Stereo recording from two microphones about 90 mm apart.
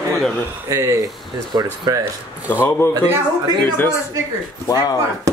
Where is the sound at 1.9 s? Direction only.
40° right (ahead or behind).